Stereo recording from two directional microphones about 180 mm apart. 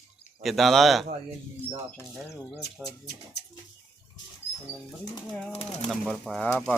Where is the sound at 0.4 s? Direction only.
Centre (ahead or behind).